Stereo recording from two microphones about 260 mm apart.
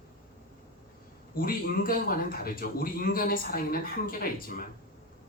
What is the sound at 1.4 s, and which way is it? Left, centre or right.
A man's voice, left.